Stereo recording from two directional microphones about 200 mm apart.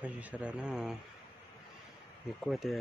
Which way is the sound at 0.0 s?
5° right (ahead or behind).